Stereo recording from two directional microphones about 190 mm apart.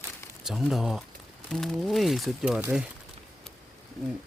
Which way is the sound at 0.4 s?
Centre (ahead or behind).